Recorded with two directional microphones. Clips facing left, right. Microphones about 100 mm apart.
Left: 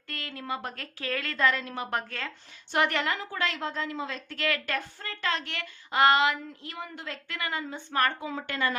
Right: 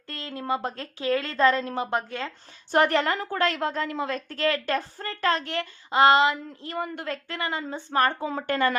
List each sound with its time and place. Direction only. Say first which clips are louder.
0.1 s a woman's voice: right 6 dB; 30° right (ahead or behind)
2.7 s a woman's voice: right 5 dB; 35° right (ahead or behind); by 4.2 s 55° right (ahead or behind)
4.3 s speech: right 5 dB; 35° right (ahead or behind)
6.7 s a woman's voice: right 9 dB; 50° right (ahead or behind)
7.3 s speech: even; 30° right (ahead or behind); by 8.7 s 45° right (ahead or behind)